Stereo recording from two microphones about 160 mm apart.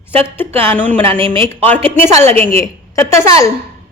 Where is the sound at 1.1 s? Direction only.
35° right (ahead or behind).